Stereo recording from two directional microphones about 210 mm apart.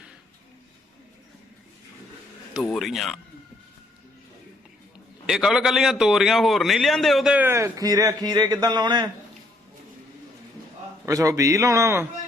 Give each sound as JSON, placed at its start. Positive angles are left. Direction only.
{"t": 2.6, "sound": "a man's voice", "side_deg": 0}
{"t": 5.2, "sound": "a man's voice", "side_deg": -5}
{"t": 11.0, "sound": "a man's voice", "side_deg": -15}